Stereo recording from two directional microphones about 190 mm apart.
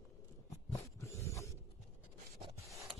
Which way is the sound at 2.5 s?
15° right (ahead or behind).